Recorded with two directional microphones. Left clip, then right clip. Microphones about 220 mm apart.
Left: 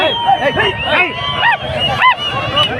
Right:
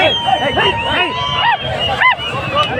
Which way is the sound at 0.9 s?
20° left (ahead or behind).